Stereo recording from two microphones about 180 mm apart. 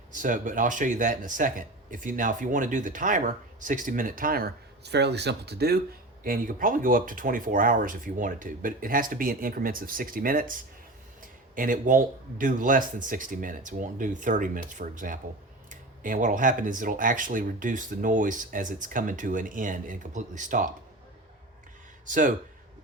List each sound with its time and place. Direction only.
0.1 s speech: 45° right (ahead or behind); by 5.8 s 60° right (ahead or behind)
6.2 s speech: 50° right (ahead or behind)
22.0 s speech: 45° right (ahead or behind)